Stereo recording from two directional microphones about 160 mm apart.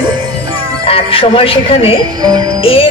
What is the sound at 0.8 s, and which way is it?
Speech, 35° left (ahead or behind).